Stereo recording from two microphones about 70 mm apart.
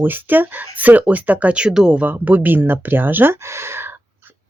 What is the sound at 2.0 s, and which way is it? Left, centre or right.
Speech, right.